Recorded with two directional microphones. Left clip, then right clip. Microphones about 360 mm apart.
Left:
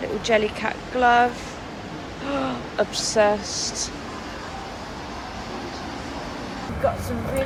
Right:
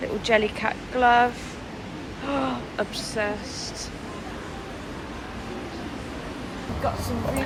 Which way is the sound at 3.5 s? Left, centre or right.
Left.